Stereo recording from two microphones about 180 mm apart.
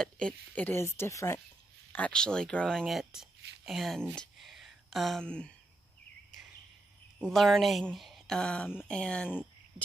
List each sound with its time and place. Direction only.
0.0 s speech: 5° left (ahead or behind)
7.2 s speech: centre (ahead or behind)